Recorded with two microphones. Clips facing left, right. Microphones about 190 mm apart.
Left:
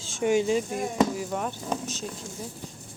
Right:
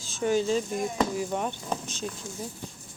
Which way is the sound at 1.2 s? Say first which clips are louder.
Right 1 dB; centre (ahead or behind).